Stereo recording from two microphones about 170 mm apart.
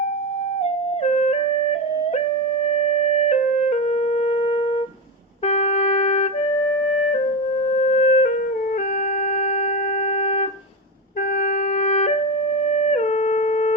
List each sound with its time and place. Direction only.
3.2 s music: 40° left (ahead or behind)
4.2 s shofar: 35° left (ahead or behind)
5.5 s music: 40° left (ahead or behind)
7.8 s music: 40° left (ahead or behind)
11.8 s music: 40° left (ahead or behind)
12.6 s wind instrument: 40° left (ahead or behind)